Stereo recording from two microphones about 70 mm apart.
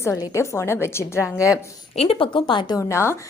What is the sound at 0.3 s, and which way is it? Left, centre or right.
Speech, left.